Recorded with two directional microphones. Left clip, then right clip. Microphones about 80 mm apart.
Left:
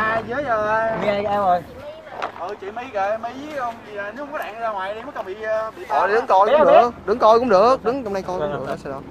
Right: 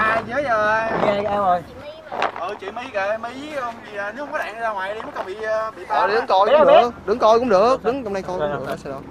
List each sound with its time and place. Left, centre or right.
0.0 s a sound: right
0.9 s speech: centre
2.9 s speech: right
4.3 s speech: right
5.9 s speech: centre
6.5 s speech: right
7.1 s speech: centre
8.4 s speech: centre